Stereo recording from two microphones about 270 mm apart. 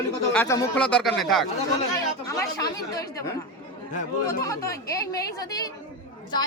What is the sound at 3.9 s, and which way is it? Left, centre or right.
Speech, left.